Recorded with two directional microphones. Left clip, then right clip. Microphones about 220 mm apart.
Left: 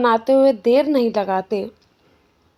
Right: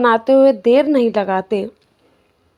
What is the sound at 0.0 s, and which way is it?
A woman's voice, 20° right (ahead or behind).